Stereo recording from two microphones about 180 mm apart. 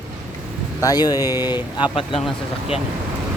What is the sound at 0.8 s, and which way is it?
Speech, 20° left (ahead or behind).